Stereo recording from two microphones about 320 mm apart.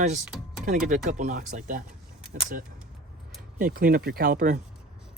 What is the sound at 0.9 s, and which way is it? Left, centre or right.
Speech, right.